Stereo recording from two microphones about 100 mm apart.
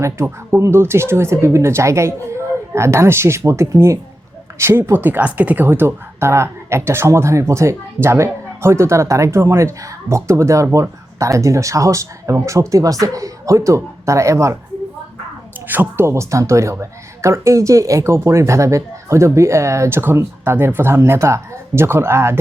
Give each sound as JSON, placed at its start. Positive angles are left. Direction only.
{"t": 0.0, "sound": "a woman's voice", "side_deg": -25}
{"t": 15.6, "sound": "a woman's voice", "side_deg": -20}